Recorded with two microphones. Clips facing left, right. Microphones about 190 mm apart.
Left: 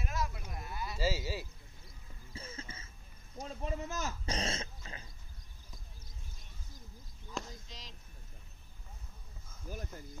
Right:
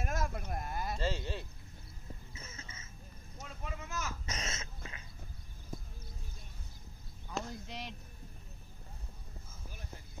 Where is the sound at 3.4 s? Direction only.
35° left (ahead or behind).